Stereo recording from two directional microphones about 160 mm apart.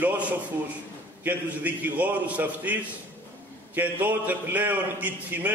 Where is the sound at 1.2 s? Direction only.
10° right (ahead or behind).